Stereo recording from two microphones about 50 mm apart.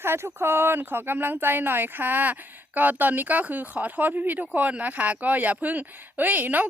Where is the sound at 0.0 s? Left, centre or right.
Right.